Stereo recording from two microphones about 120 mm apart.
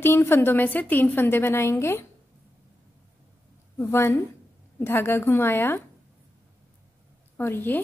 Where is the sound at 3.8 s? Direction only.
20° left (ahead or behind).